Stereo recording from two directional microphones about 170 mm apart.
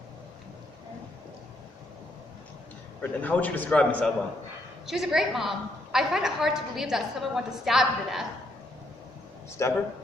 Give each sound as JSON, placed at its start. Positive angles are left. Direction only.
{"t": 3.0, "sound": "a man's voice", "side_deg": 10}
{"t": 9.6, "sound": "a man's voice", "side_deg": 15}